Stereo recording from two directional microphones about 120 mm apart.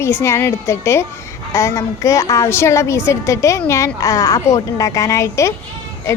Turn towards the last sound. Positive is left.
turn(degrees=25)  # may be behind; listen again after turning